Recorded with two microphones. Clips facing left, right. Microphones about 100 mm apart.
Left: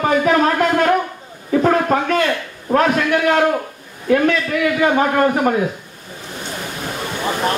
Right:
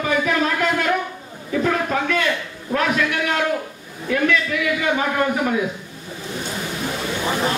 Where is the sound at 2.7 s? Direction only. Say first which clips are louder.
Left 5 dB; 45° left (ahead or behind).